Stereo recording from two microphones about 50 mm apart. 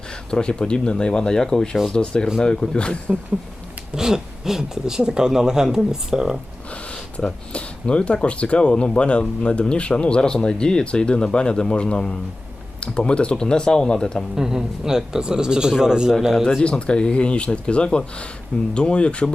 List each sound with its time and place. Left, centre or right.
0.3 s speech: centre
3.9 s speech: centre
6.9 s speech: centre
14.3 s speech: centre
16.4 s speech: centre